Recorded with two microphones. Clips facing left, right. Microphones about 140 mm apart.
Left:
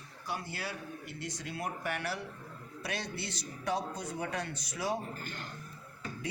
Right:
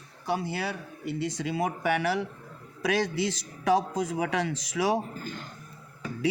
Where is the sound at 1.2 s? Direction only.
90° right.